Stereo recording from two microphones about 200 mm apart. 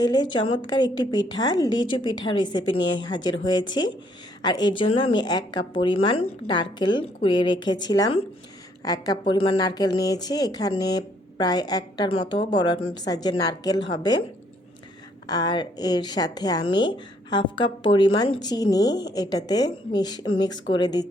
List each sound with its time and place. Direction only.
0.0 s a woman's voice: 20° left (ahead or behind)
4.4 s a woman's voice: 20° left (ahead or behind)
15.3 s a woman's voice: 20° left (ahead or behind)